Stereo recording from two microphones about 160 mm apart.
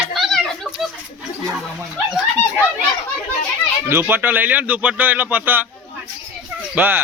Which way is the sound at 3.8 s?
15° right (ahead or behind).